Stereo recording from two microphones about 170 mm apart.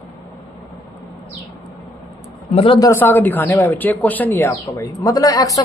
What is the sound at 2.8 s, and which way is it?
Speech, 10° left (ahead or behind).